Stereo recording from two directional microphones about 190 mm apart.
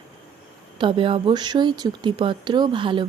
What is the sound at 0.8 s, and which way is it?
Speech, 25° right (ahead or behind).